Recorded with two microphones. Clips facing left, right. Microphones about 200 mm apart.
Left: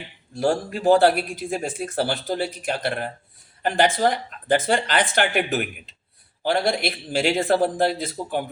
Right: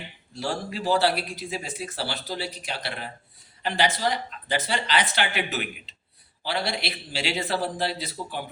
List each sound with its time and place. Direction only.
0.3 s speech: 50° left (ahead or behind)